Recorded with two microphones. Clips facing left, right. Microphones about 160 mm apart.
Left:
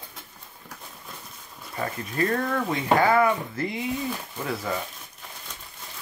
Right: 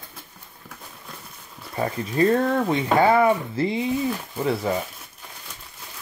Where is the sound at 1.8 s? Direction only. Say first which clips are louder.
Right 6 dB; 25° right (ahead or behind).